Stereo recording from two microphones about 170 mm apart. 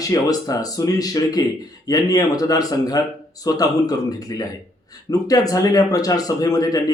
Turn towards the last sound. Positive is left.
turn(degrees=20)  # may be behind; listen again after turning